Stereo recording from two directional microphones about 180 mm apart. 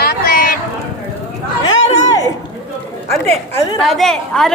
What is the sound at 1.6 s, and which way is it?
Chatter, 20° left (ahead or behind).